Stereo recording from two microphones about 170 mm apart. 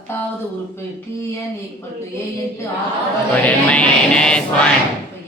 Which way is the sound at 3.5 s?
5° left (ahead or behind).